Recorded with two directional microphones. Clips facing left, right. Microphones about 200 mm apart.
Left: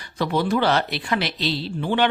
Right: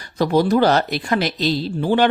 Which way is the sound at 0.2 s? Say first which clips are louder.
Right 6 dB; 40° right (ahead or behind).